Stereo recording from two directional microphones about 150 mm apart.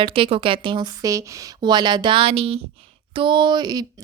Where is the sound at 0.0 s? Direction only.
35° right (ahead or behind).